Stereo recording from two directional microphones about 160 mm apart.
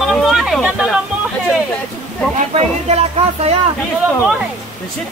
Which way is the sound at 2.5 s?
40° right (ahead or behind).